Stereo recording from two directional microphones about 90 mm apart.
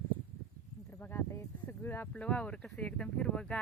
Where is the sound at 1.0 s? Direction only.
25° left (ahead or behind).